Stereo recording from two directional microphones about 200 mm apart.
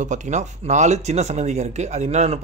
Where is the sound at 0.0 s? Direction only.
35° right (ahead or behind).